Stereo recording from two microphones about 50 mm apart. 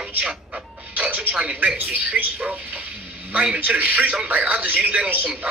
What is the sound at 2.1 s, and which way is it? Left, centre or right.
Speech, right.